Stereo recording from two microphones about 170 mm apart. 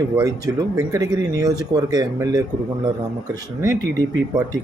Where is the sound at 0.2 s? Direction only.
20° right (ahead or behind).